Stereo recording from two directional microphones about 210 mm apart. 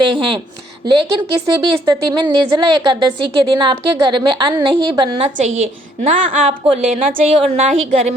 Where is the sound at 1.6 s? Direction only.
20° right (ahead or behind).